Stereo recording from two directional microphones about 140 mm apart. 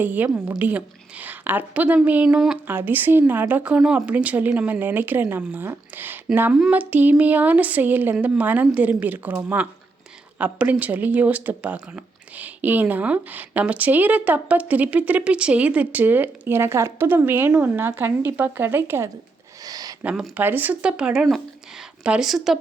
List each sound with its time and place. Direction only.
0.0 s speech: 10° right (ahead or behind)
19.6 s a sound: 25° right (ahead or behind)
20.1 s speech: 5° right (ahead or behind)